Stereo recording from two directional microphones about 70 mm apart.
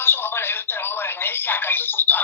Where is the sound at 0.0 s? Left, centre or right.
Left.